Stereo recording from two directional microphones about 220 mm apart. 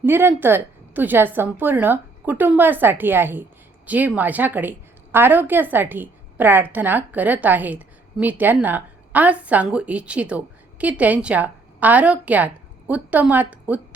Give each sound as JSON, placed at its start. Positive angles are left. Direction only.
{"t": 0.0, "sound": "a woman's voice", "side_deg": -10}